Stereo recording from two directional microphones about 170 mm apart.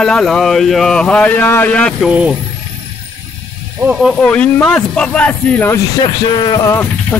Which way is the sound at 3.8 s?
5° right (ahead or behind).